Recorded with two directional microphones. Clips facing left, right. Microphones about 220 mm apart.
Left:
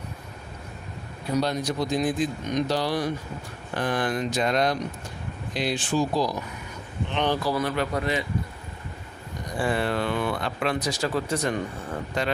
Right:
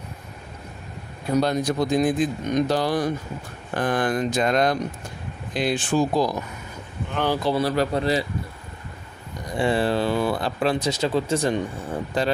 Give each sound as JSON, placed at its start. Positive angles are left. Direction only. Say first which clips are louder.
{"t": 1.3, "sound": "speech", "louder": "right 4 dB", "side_deg": -50}
{"t": 7.1, "sound": "speech", "louder": "right 1 dB", "side_deg": -5}
{"t": 7.3, "sound": "speech", "louder": "right 3 dB", "side_deg": -25}
{"t": 7.6, "sound": "a man's voice", "louder": "right 4 dB", "side_deg": -35}
{"t": 9.6, "sound": "a man's voice", "louder": "right 4 dB", "side_deg": -30}